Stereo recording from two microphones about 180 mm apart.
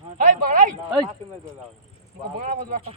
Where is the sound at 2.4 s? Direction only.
45° right (ahead or behind).